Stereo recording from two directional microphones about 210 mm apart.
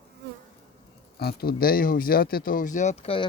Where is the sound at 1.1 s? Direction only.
50° left (ahead or behind); by 3.3 s 25° left (ahead or behind).